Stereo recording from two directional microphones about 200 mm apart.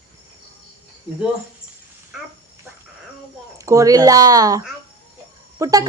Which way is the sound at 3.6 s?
15° right (ahead or behind).